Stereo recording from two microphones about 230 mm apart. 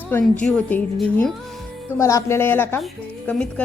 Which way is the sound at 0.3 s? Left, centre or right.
Centre.